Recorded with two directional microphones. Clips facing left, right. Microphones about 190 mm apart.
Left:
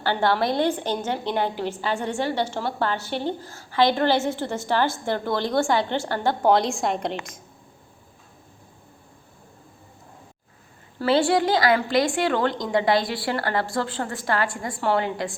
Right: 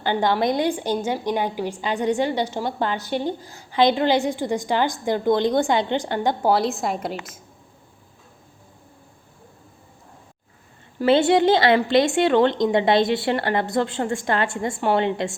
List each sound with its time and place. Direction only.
0.0 s a woman's voice: 15° right (ahead or behind)
6.5 s a woman's voice: 5° right (ahead or behind)
11.0 s a woman's voice: 20° right (ahead or behind)